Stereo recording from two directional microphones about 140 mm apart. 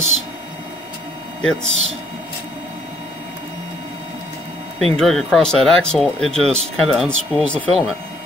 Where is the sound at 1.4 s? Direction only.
5° left (ahead or behind).